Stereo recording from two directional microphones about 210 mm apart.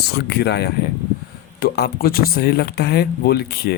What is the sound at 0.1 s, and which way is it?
Speech, 50° left (ahead or behind).